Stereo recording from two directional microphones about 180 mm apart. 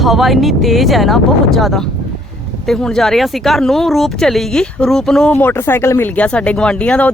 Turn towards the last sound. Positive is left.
turn(degrees=5)  # may be behind; listen again after turning